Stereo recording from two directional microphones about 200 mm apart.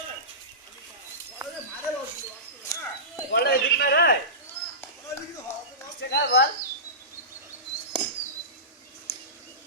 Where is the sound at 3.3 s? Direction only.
50° left (ahead or behind).